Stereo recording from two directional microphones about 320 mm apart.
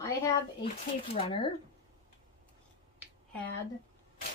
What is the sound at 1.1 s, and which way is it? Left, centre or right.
Speech, centre.